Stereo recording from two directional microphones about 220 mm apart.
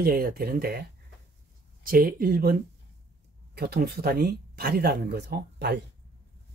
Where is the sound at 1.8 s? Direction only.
40° right (ahead or behind).